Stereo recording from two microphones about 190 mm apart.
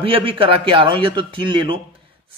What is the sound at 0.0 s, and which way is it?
Speech, 30° right (ahead or behind).